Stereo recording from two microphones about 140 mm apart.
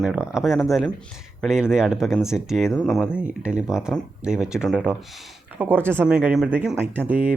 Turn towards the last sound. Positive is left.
turn(degrees=-10)  # may be behind; listen again after turning